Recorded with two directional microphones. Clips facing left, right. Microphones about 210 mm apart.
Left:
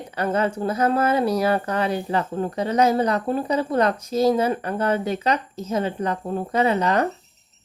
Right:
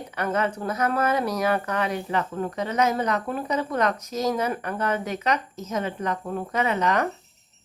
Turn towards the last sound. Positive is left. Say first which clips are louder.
# left 4 dB
turn(degrees=30)  # may be behind; listen again after turning